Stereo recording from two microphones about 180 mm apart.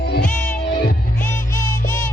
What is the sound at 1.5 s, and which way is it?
Music, 15° left (ahead or behind).